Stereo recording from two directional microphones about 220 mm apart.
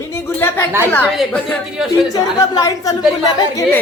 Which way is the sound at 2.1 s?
15° left (ahead or behind).